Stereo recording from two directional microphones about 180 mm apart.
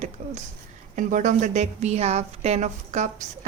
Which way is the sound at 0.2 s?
45° right (ahead or behind).